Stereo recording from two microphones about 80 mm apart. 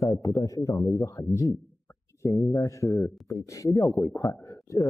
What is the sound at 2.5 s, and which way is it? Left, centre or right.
Speech, left.